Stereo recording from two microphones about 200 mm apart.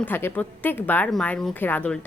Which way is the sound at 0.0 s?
10° left (ahead or behind).